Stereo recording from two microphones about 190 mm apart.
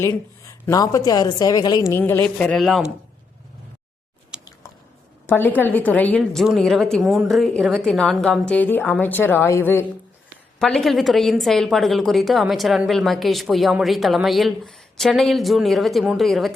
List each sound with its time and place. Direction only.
0.6 s a woman's voice: 20° left (ahead or behind); by 2.9 s centre (ahead or behind)
4.3 s chewing: 5° right (ahead or behind)
5.2 s a woman's voice: 10° left (ahead or behind)